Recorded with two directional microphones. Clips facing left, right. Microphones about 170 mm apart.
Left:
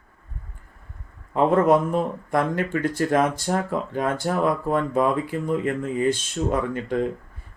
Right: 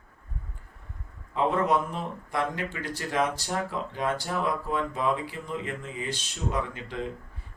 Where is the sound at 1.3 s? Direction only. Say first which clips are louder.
Left 7 dB; 50° left (ahead or behind).